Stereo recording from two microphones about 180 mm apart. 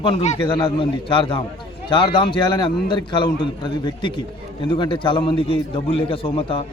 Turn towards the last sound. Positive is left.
turn(degrees=30)  # may be behind; listen again after turning